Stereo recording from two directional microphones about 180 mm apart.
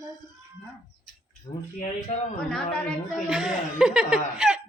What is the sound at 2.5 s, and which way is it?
A woman's voice, centre (ahead or behind).